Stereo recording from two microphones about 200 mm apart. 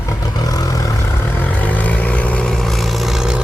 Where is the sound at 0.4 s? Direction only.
20° left (ahead or behind).